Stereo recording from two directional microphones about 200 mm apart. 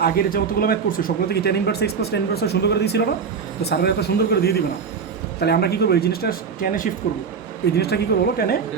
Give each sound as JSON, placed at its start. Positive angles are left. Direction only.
{"t": 0.0, "sound": "speech", "side_deg": 50}